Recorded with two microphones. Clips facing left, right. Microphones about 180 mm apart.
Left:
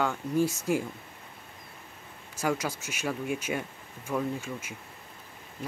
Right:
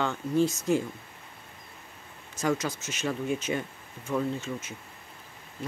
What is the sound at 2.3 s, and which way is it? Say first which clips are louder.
Speech: right 1 dB; 10° left (ahead or behind).